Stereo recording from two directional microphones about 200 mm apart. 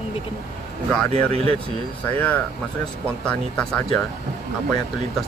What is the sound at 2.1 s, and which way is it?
Speech, 10° left (ahead or behind).